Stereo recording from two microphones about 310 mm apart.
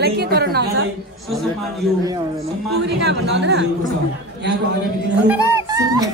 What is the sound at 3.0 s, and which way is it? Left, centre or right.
Speech, right.